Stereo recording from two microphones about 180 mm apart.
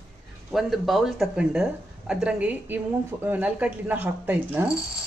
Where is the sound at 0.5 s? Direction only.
Centre (ahead or behind).